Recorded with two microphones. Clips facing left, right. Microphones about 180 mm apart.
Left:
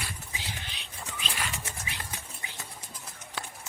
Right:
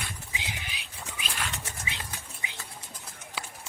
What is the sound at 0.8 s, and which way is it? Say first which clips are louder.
Dog: left 1 dB; centre (ahead or behind).